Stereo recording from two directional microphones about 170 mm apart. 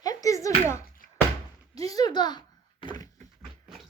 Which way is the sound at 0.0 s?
20° left (ahead or behind).